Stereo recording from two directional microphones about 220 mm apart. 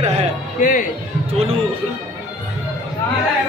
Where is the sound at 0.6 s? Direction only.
35° left (ahead or behind).